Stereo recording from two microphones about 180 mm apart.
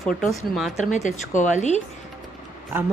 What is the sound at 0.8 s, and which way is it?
Speech, 40° left (ahead or behind).